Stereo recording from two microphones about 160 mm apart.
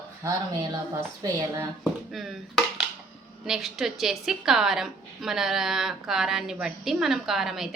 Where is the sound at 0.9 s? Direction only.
15° right (ahead or behind).